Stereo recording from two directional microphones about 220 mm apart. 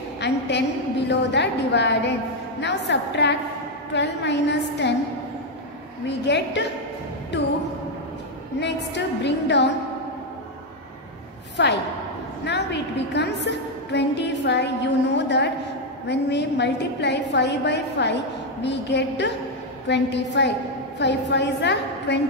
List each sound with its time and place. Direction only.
0.2 s a woman's voice: 50° left (ahead or behind)
6.0 s a woman's voice: 50° left (ahead or behind)
8.5 s a woman's voice: 50° left (ahead or behind)
11.5 s a woman's voice: 50° left (ahead or behind)